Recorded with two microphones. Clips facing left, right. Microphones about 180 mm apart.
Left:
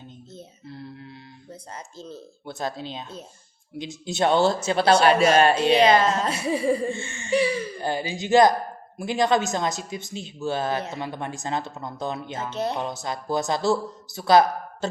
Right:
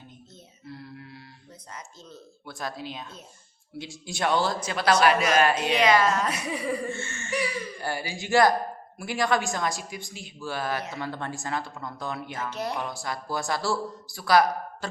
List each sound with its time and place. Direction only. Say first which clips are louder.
0.7 s a sound: left 1 dB; 25° left (ahead or behind)
1.7 s speech: left 5 dB; 30° left (ahead or behind)
7.3 s speech: left 8 dB; 30° left (ahead or behind)